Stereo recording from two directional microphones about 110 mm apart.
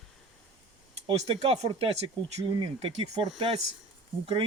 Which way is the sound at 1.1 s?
65° right (ahead or behind).